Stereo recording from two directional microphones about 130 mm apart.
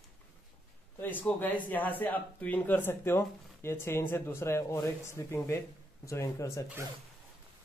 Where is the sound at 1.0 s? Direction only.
15° left (ahead or behind).